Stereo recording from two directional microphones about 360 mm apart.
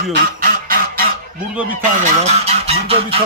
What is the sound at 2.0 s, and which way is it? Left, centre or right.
Speech, centre.